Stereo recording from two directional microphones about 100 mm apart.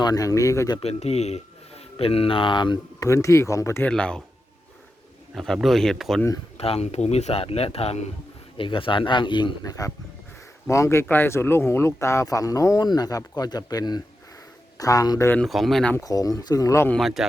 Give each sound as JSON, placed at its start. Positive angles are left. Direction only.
{"t": 0.0, "sound": "speech", "side_deg": 40}
{"t": 0.8, "sound": "speech", "side_deg": 90}
{"t": 2.0, "sound": "speech", "side_deg": 75}
{"t": 3.0, "sound": "speech", "side_deg": 30}
{"t": 3.8, "sound": "speech", "side_deg": 10}
{"t": 5.3, "sound": "speech", "side_deg": 0}
{"t": 6.6, "sound": "speech", "side_deg": 90}
{"t": 8.5, "sound": "speech", "side_deg": 60}
{"t": 9.6, "sound": "speech", "side_deg": 35}
{"t": 15.4, "sound": "speech", "side_deg": 0}
{"t": 16.0, "sound": "speech", "side_deg": 40}
{"t": 16.9, "sound": "speech", "side_deg": 0}